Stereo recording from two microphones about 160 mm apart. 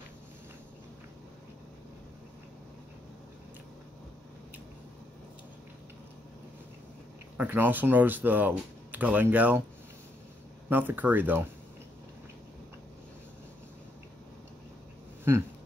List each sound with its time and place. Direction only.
7.3 s speech: 10° right (ahead or behind)
10.7 s speech: 10° right (ahead or behind)